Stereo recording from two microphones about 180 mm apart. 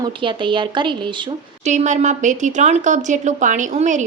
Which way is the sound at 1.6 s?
40° right (ahead or behind).